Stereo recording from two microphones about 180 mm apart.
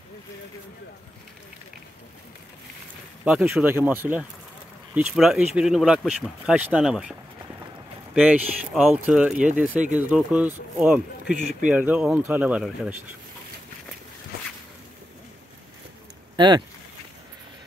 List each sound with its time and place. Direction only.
3.3 s speech: 5° right (ahead or behind)
16.3 s speech: 25° right (ahead or behind)